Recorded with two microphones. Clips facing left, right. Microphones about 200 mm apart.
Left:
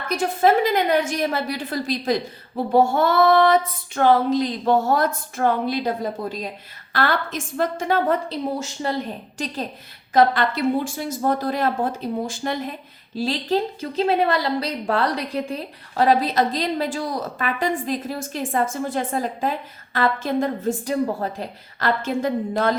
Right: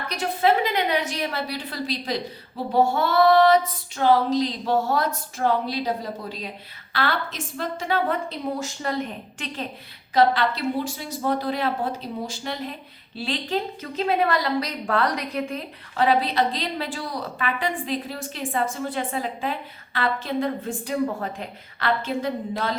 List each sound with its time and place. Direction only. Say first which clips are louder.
0.1 s a woman's voice: left 4 dB; 45° left (ahead or behind)
8.5 s speech: left 2 dB; 25° left (ahead or behind)
10.2 s a woman's voice: left 2 dB; 50° left (ahead or behind)
13.1 s a woman's voice: left 5 dB; 40° left (ahead or behind)